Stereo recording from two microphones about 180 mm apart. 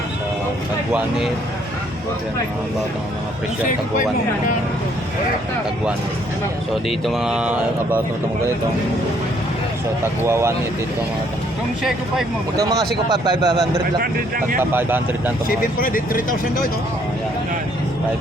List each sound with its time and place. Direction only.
6.8 s speech: centre (ahead or behind)
10.2 s speech: 15° right (ahead or behind)
11.8 s speech: centre (ahead or behind)
12.5 s speech: 20° right (ahead or behind)
14.6 s speech: 10° right (ahead or behind)
15.4 s speech: 50° left (ahead or behind)